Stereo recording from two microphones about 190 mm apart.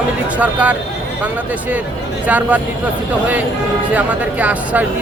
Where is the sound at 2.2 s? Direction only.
10° right (ahead or behind).